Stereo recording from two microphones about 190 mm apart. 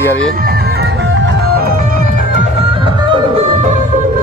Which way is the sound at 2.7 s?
25° right (ahead or behind).